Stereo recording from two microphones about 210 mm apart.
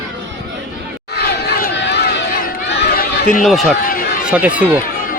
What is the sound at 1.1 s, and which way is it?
Run, 50° left (ahead or behind).